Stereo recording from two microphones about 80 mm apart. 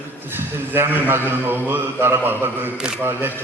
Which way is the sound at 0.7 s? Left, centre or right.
Right.